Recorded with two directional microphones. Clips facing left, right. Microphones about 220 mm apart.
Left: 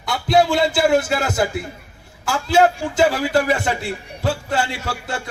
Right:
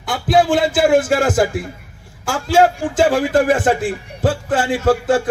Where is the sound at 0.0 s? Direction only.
50° right (ahead or behind).